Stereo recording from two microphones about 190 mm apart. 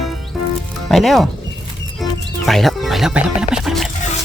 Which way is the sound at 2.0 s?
Centre (ahead or behind).